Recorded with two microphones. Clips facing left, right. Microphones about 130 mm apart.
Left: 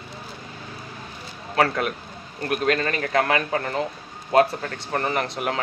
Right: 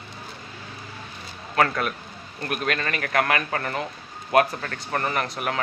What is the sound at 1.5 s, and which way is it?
A man's voice, 30° left (ahead or behind).